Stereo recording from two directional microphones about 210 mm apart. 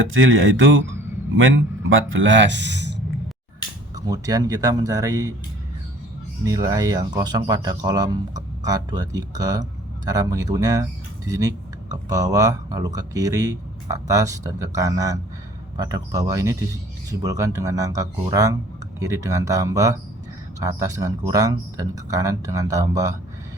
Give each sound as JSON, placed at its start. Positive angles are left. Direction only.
{"t": 0.1, "sound": "speech", "side_deg": -65}
{"t": 3.9, "sound": "speech", "side_deg": -15}
{"t": 6.4, "sound": "speech", "side_deg": -15}